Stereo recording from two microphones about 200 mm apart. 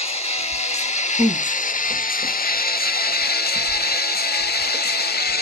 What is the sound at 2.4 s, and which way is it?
Music, 45° left (ahead or behind).